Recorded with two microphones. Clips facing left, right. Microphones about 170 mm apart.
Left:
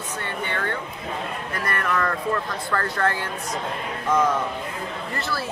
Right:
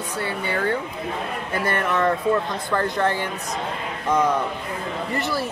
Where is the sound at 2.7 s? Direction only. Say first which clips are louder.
Right 3 dB; 15° right (ahead or behind).